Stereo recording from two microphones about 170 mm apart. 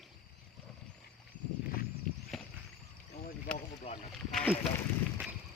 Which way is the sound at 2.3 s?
Centre (ahead or behind).